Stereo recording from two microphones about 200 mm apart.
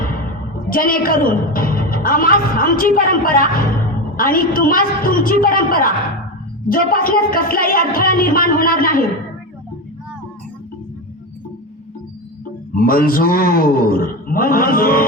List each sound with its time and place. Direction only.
0.7 s a woman's voice: 45° left (ahead or behind)
12.7 s a woman's voice: 45° left (ahead or behind)